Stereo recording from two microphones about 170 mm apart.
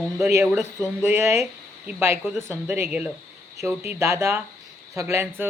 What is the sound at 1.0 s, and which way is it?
Speech, 15° right (ahead or behind).